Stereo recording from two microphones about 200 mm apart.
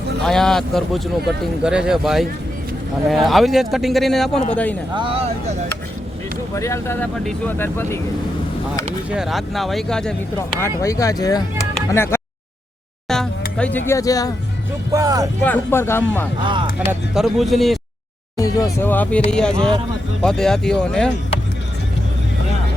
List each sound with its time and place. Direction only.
0.3 s speech: 5° left (ahead or behind)
4.9 s speech: 25° right (ahead or behind)
6.5 s speech: 15° left (ahead or behind)
9.0 s speech: centre (ahead or behind)
10.6 s speech: 15° left (ahead or behind)
13.6 s speech: 10° left (ahead or behind)
14.9 s speech: 15° right (ahead or behind)
15.4 s speech: 10° left (ahead or behind)
16.4 s speech: 25° right (ahead or behind)
16.7 s speech: 10° right (ahead or behind)
18.3 s speech: 15° left (ahead or behind)